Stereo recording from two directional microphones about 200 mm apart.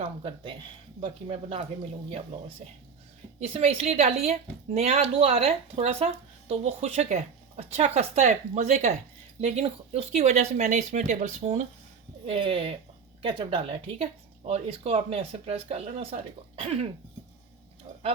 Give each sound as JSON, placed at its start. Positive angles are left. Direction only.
{"t": 0.0, "sound": "a woman's voice", "side_deg": -25}